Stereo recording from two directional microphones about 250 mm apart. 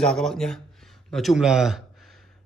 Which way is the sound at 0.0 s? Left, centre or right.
Centre.